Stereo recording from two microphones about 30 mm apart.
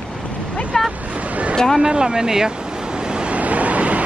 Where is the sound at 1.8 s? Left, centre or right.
Right.